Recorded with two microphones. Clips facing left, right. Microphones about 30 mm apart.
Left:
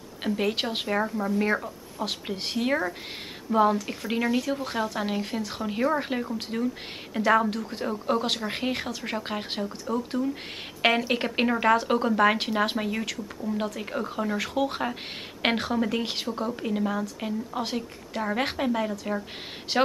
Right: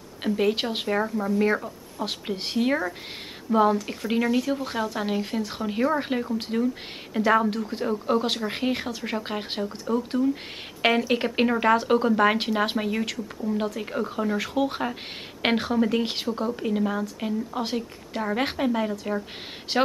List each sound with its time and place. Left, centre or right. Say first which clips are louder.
0.2 s speech: right 3 dB; centre